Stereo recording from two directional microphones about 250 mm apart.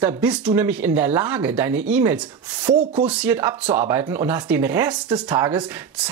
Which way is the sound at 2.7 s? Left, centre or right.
Centre.